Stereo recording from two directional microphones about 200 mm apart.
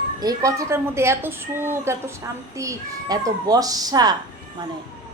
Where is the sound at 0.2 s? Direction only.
20° right (ahead or behind).